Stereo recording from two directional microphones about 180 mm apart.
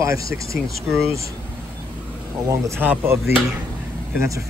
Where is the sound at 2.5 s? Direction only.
10° right (ahead or behind).